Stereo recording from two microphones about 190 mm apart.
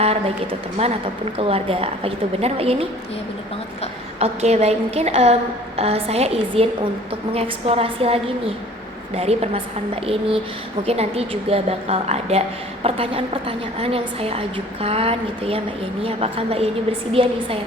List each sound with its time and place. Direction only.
0.0 s a sound: 30° right (ahead or behind)
0.8 s a woman's voice: 35° right (ahead or behind)
4.2 s a woman's voice: 35° right (ahead or behind)